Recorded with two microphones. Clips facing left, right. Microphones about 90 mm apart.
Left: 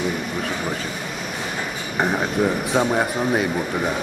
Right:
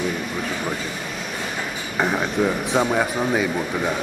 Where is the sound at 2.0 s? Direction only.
5° left (ahead or behind).